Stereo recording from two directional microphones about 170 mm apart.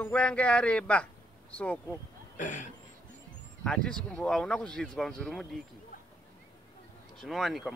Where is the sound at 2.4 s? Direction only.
45° left (ahead or behind).